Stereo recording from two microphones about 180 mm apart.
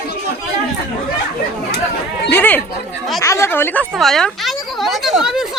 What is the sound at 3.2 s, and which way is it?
Speech, 15° left (ahead or behind).